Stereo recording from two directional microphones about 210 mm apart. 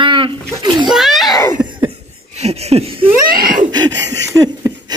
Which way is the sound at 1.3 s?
15° left (ahead or behind).